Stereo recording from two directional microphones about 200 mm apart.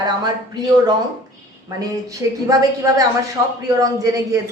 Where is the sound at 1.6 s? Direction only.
15° right (ahead or behind).